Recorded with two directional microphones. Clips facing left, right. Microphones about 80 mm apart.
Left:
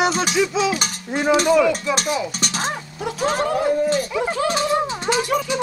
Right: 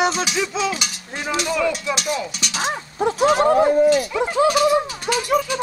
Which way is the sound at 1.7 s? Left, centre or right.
Left.